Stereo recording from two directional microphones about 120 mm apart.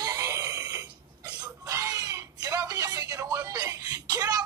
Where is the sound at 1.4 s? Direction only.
30° right (ahead or behind).